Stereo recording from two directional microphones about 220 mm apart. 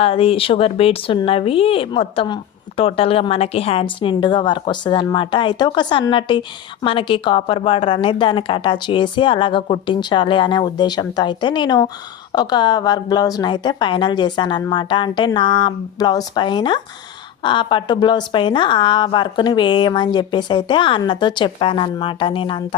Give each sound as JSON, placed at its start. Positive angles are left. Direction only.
{"t": 0.0, "sound": "speech", "side_deg": 25}